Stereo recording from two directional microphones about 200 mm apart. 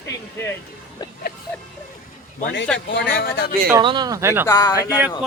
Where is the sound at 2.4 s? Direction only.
55° left (ahead or behind).